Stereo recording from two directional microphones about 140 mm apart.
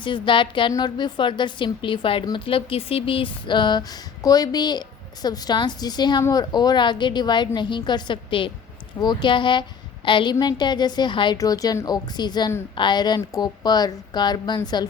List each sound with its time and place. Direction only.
0.0 s speech: 35° left (ahead or behind)